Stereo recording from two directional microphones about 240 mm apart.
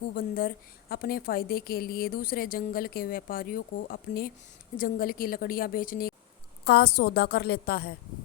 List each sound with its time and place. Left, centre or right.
0.2 s a woman's voice: left